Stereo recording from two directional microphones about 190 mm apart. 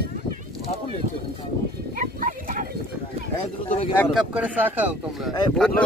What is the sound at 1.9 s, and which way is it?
Speech, 45° right (ahead or behind).